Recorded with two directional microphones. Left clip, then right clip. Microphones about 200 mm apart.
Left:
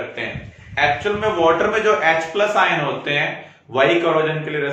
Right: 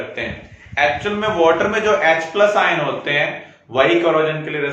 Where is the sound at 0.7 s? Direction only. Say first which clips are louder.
Right 1 dB; 25° right (ahead or behind).